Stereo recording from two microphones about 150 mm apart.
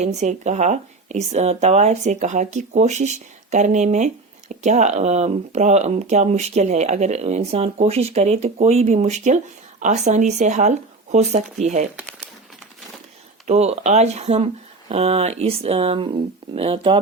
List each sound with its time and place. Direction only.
0.0 s speech: 50° right (ahead or behind)
13.5 s speech: 50° right (ahead or behind)